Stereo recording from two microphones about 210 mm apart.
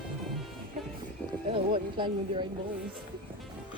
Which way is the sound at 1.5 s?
25° right (ahead or behind).